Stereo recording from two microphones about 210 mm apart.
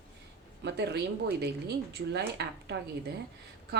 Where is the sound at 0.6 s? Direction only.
55° right (ahead or behind).